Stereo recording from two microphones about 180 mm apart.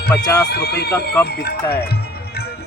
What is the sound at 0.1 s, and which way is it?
Speech, 15° left (ahead or behind).